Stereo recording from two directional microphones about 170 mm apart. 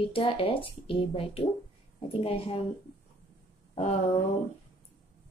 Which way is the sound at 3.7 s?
40° left (ahead or behind).